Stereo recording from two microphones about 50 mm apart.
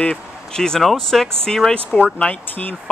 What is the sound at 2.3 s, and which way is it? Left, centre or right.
Speech, left.